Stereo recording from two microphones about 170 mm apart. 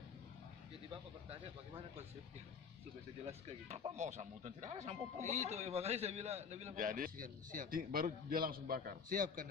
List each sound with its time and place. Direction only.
0.8 s speech: 30° right (ahead or behind)
3.3 s speech: 40° right (ahead or behind)